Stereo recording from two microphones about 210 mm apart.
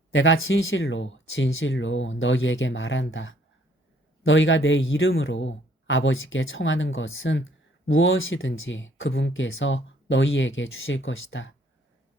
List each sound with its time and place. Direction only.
0.1 s speech: 65° left (ahead or behind)